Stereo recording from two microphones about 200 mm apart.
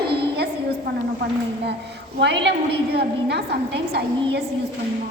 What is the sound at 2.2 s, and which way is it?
A woman's voice, 60° right (ahead or behind).